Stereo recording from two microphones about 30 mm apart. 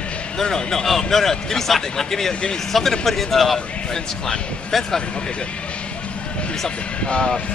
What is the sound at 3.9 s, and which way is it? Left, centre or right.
Speech, left.